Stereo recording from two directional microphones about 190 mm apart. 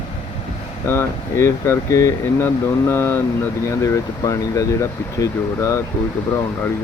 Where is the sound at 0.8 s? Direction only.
10° left (ahead or behind).